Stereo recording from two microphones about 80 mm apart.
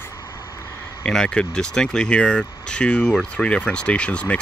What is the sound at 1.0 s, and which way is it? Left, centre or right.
Speech, centre.